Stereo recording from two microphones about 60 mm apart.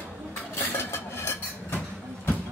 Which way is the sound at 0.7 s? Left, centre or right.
Left.